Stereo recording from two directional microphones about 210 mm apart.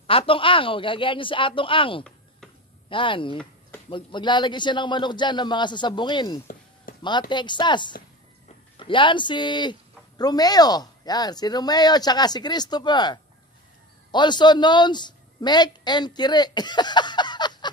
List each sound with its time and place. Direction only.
0.0 s a woman's voice: 25° left (ahead or behind)